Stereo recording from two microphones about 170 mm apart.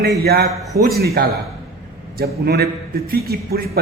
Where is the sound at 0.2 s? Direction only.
65° right (ahead or behind).